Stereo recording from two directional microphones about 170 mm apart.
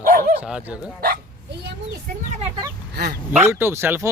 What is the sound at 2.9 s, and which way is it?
Speech, 75° right (ahead or behind).